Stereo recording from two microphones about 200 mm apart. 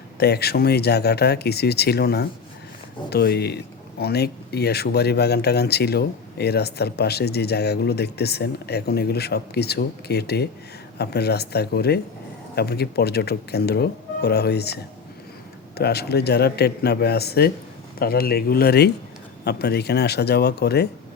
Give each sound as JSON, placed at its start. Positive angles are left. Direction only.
{"t": 0.2, "sound": "speech", "side_deg": 55}
{"t": 15.8, "sound": "speech", "side_deg": 55}